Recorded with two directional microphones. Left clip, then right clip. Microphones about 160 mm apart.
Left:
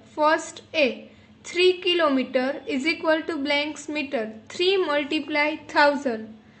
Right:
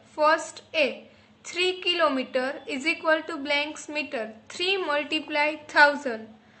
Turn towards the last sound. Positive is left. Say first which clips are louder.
# even
turn(degrees=15)  # may be behind; listen again after turning